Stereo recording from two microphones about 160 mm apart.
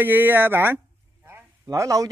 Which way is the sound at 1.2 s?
15° right (ahead or behind).